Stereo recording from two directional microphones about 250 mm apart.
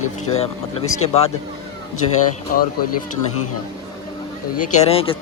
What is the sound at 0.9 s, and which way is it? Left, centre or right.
Speech, left.